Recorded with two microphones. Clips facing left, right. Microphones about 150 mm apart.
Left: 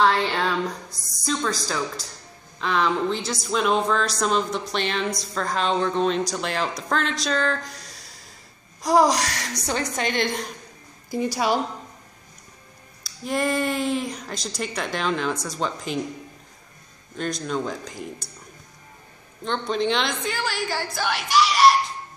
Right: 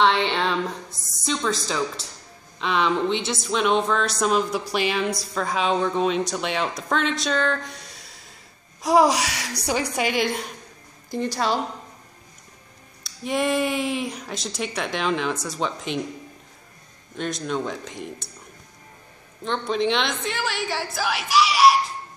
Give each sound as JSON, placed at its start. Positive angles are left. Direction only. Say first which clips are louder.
{"t": 0.0, "sound": "a sound", "louder": "even", "side_deg": 5}
{"t": 2.6, "sound": "a woman's voice", "louder": "right 1 dB", "side_deg": 0}
{"t": 11.1, "sound": "a woman's voice", "louder": "left 1 dB", "side_deg": 10}
{"t": 13.0, "sound": "a woman's voice", "louder": "right 1 dB", "side_deg": 0}
{"t": 17.1, "sound": "a woman's voice", "louder": "even", "side_deg": 0}
{"t": 19.4, "sound": "a woman's voice", "louder": "right 1 dB", "side_deg": 0}